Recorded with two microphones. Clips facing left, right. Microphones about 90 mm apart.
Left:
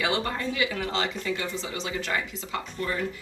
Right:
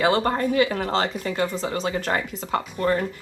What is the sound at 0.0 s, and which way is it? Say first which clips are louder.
Speech: right 7 dB; 45° right (ahead or behind).